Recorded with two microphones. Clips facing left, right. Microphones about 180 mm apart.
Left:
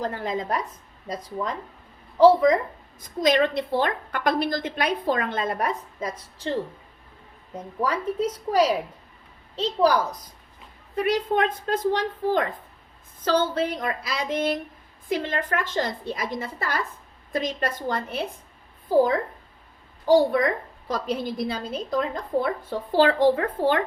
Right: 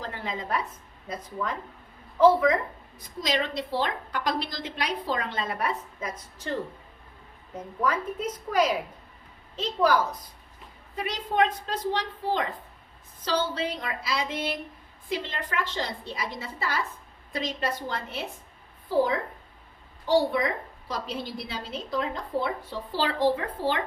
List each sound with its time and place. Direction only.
0.0 s a woman's voice: 45° left (ahead or behind)
3.0 s a woman's voice: 55° left (ahead or behind); by 6.6 s 35° left (ahead or behind)
7.8 s speech: 30° left (ahead or behind)
10.9 s a woman's voice: 55° left (ahead or behind)
20.1 s a woman's voice: 50° left (ahead or behind)